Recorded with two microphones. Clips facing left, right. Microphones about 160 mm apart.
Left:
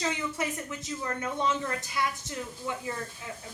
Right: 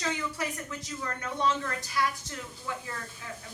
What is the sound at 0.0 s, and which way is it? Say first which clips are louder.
A woman's voice: left 2 dB; 20° left (ahead or behind).